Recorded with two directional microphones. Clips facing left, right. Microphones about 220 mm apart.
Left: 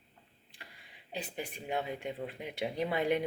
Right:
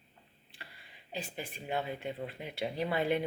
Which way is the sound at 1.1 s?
20° left (ahead or behind).